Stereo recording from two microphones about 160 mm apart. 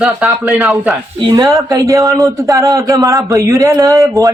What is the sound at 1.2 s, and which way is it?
A man's voice, 25° right (ahead or behind).